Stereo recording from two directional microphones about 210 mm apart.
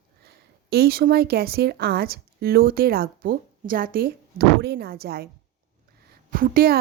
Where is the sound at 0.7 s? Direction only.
45° right (ahead or behind).